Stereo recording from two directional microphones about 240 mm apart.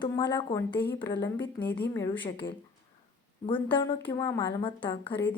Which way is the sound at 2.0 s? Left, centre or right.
Left.